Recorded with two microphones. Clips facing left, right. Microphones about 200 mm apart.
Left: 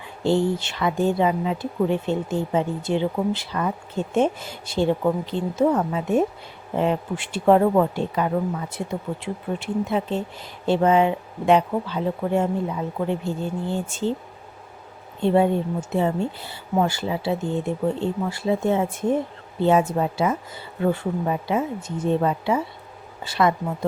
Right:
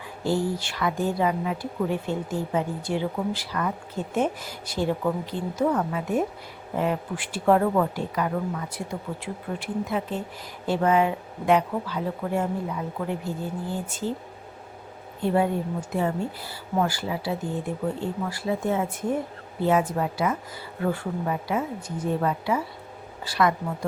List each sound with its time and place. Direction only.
0.3 s speech: 25° left (ahead or behind)
15.2 s speech: 25° left (ahead or behind)